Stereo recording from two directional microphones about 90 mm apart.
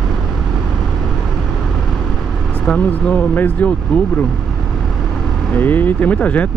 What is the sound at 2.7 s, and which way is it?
Speech, 15° left (ahead or behind).